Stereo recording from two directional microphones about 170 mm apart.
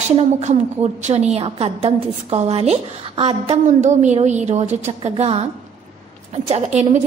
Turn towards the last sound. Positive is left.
turn(degrees=-40)  # may be behind; listen again after turning